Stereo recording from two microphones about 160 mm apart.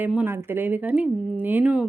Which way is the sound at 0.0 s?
10° right (ahead or behind).